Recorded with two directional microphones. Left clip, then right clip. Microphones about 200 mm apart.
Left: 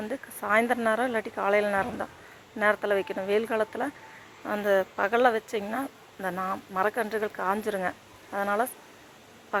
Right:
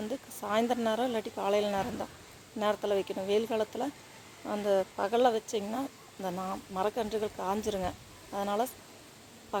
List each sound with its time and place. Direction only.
0.1 s speech: centre (ahead or behind)
4.6 s speech: 20° left (ahead or behind)
5.1 s speech: centre (ahead or behind)
5.8 s speech: 10° left (ahead or behind)
6.7 s speech: centre (ahead or behind)